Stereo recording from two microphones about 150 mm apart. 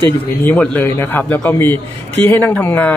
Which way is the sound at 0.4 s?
10° left (ahead or behind).